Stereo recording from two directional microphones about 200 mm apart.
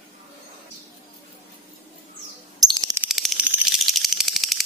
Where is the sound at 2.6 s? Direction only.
20° right (ahead or behind).